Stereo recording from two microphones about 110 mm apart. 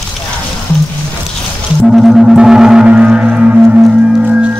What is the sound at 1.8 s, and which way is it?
Gong, centre (ahead or behind).